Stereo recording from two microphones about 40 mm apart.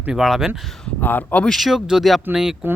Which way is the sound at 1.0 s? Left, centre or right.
Left.